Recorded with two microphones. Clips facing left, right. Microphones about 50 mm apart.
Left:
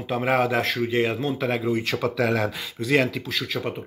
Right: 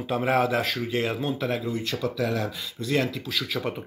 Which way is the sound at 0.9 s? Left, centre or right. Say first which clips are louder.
Left 4 dB; centre.